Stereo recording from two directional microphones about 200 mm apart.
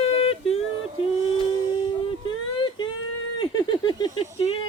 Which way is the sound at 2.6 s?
25° left (ahead or behind).